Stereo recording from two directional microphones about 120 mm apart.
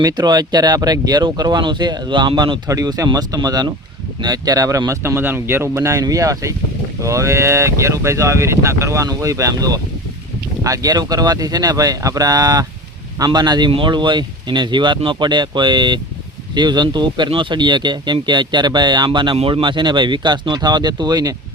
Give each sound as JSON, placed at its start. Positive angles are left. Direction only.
{"t": 0.0, "sound": "speech", "side_deg": -35}